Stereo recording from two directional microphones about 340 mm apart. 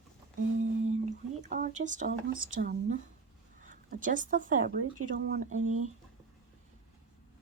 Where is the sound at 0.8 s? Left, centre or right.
Right.